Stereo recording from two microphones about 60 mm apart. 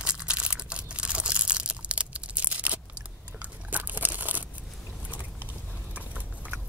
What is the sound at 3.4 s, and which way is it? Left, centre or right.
Crunch, right.